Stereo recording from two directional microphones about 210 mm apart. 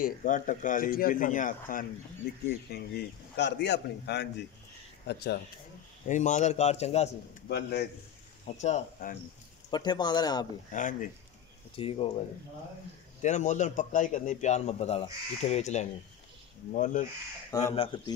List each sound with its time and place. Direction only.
0.0 s a man's voice: 35° left (ahead or behind)
6.0 s a man's voice: 35° left (ahead or behind)
7.4 s a man's voice: 55° left (ahead or behind)
8.5 s a man's voice: 35° left (ahead or behind)
9.7 s speech: 20° left (ahead or behind)
10.7 s a man's voice: 35° left (ahead or behind)
11.7 s speech: 25° left (ahead or behind)
13.2 s a man's voice: 35° left (ahead or behind)
17.5 s speech: 15° left (ahead or behind)
17.7 s speech: 25° left (ahead or behind)